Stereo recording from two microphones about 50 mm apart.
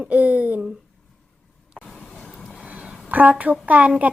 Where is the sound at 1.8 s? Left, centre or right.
Centre.